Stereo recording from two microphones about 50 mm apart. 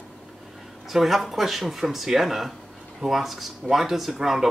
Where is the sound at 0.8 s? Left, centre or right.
Centre.